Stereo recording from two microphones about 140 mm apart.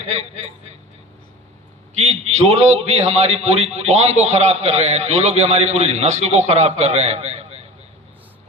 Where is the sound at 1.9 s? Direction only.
55° right (ahead or behind).